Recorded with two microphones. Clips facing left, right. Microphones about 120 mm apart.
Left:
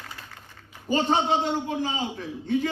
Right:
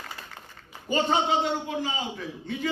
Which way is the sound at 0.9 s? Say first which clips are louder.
Left 1 dB; 35° left (ahead or behind).